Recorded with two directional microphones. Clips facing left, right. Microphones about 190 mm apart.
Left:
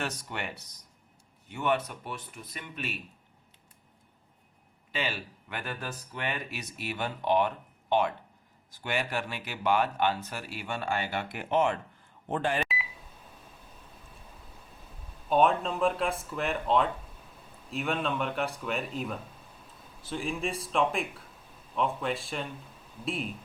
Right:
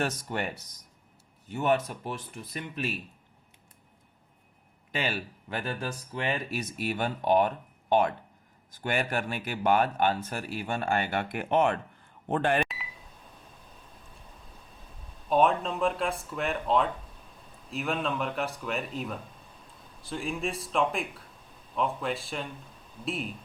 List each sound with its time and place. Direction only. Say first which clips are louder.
0.0 s speech: right 5 dB; 40° right (ahead or behind)
4.9 s speech: right 2 dB; 45° right (ahead or behind)
12.6 s a sound: left 5 dB; centre (ahead or behind)
14.8 s speech: right 1 dB; centre (ahead or behind)